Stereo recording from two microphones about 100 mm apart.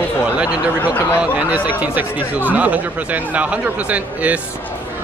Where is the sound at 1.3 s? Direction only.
15° right (ahead or behind).